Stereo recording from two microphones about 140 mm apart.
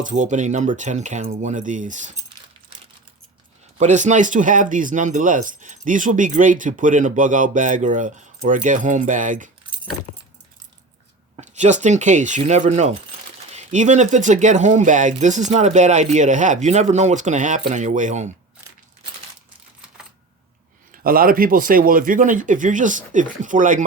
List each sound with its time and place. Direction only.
0.0 s speech: 60° right (ahead or behind)
3.8 s speech: 60° right (ahead or behind)
11.3 s speech: 60° right (ahead or behind)
21.0 s speech: 90° right; by 23.8 s 70° right (ahead or behind)